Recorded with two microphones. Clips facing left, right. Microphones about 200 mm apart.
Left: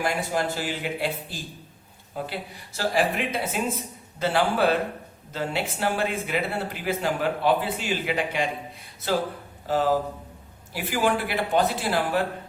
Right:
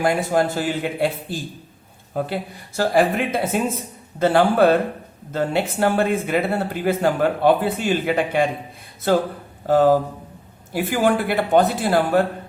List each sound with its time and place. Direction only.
0.0 s a man's voice: 50° right (ahead or behind)